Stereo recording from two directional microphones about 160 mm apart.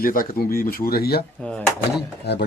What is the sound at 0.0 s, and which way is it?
Speech, 60° left (ahead or behind).